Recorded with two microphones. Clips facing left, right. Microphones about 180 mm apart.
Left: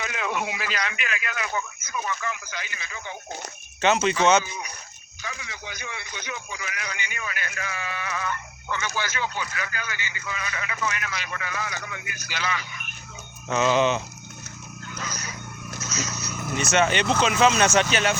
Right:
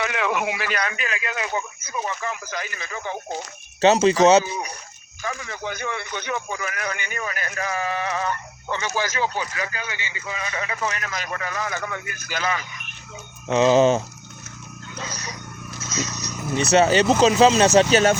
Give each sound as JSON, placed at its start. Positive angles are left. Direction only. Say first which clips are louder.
{"t": 0.0, "sound": "speech", "louder": "right 5 dB", "side_deg": -75}
{"t": 0.9, "sound": "a man's voice", "louder": "right 3 dB", "side_deg": -35}
{"t": 5.2, "sound": "a man's voice", "louder": "right 8 dB", "side_deg": -50}
{"t": 13.5, "sound": "a man's voice", "louder": "right 5 dB", "side_deg": -35}
{"t": 14.9, "sound": "a sound", "louder": "right 2 dB", "side_deg": -30}
{"t": 16.0, "sound": "vehicle", "louder": "right 4 dB", "side_deg": -35}
{"t": 16.6, "sound": "a man's voice", "louder": "right 6 dB", "side_deg": -35}